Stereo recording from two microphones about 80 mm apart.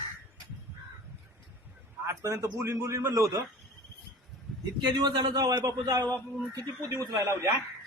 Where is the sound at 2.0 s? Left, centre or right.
Right.